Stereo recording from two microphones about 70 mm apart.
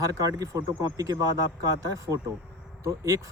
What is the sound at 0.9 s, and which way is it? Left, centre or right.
Speech, right.